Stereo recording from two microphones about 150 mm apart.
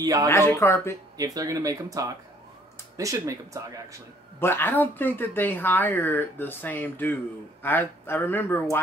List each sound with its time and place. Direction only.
0.0 s speech: 20° right (ahead or behind)
0.3 s speech: 15° left (ahead or behind)
1.1 s speech: 25° right (ahead or behind)
4.4 s speech: 15° left (ahead or behind)